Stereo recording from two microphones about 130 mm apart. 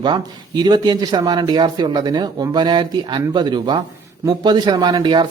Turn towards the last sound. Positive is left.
turn(degrees=-35)  # may be behind; listen again after turning